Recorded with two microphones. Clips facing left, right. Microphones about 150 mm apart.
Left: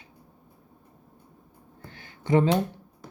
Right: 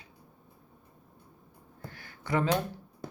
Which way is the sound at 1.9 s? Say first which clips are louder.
Left 8 dB; 20° left (ahead or behind).